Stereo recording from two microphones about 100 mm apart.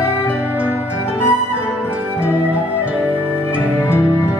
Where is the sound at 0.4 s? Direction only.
20° right (ahead or behind).